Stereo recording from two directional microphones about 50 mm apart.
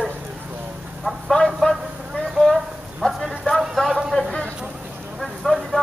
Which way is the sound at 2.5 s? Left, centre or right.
Centre.